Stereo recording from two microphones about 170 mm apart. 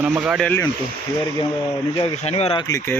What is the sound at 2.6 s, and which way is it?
Speech, 20° left (ahead or behind).